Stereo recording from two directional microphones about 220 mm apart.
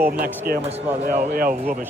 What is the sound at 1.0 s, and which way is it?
Speech, 40° right (ahead or behind).